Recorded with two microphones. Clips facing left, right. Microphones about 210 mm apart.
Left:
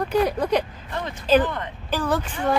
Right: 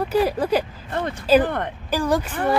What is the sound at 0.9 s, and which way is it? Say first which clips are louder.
Speech: right 5 dB; 55° right (ahead or behind).